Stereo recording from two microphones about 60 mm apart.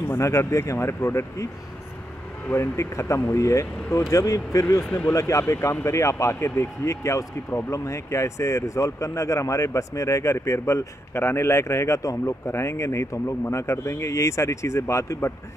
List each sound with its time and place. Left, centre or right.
0.2 s speech: left
2.5 s speech: left